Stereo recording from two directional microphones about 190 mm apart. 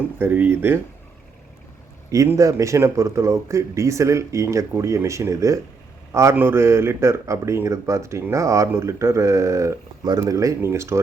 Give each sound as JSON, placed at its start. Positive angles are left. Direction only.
{"t": 0.2, "sound": "speech", "side_deg": -10}
{"t": 2.0, "sound": "speech", "side_deg": -15}